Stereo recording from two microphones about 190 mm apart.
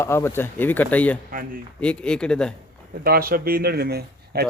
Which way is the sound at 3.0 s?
50° right (ahead or behind).